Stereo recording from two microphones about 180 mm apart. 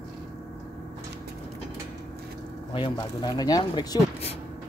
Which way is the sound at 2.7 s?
25° left (ahead or behind).